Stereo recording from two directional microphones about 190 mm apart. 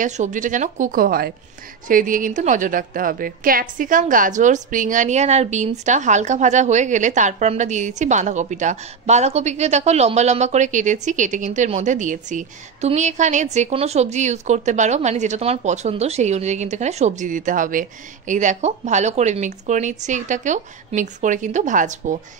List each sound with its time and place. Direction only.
0.0 s a woman's voice: 40° right (ahead or behind)